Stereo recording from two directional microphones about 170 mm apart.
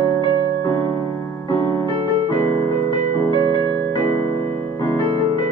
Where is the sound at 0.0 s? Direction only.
25° left (ahead or behind).